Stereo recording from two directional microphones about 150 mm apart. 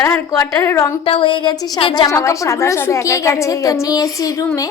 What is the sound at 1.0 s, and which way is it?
A woman's voice, 35° left (ahead or behind).